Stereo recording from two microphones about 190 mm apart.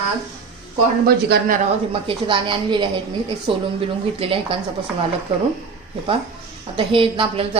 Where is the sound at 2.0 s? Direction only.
25° right (ahead or behind).